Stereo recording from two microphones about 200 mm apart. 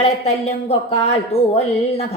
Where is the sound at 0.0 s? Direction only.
30° left (ahead or behind).